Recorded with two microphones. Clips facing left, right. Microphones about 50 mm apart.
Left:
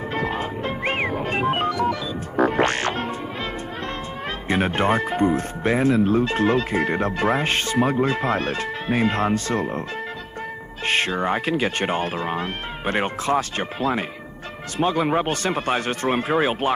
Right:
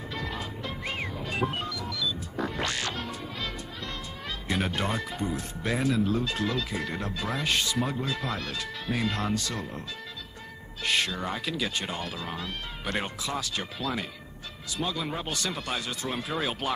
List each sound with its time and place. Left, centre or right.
0.1 s music: left
4.5 s speech: left
10.9 s speech: left